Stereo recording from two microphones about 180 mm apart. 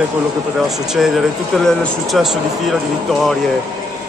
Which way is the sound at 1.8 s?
Centre (ahead or behind).